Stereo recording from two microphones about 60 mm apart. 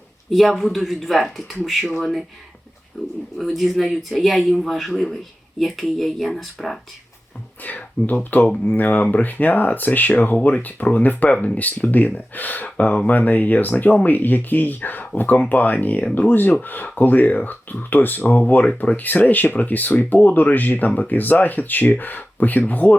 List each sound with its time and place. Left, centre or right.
0.3 s speech: centre
7.6 s speech: left